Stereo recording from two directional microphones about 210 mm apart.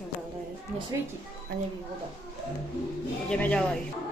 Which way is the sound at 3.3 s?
5° left (ahead or behind).